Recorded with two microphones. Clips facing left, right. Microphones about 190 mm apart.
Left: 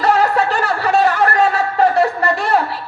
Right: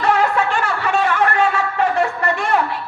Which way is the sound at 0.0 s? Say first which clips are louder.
Left 2 dB; 40° left (ahead or behind).